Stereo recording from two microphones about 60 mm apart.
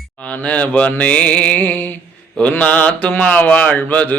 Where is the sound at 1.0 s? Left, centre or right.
Left.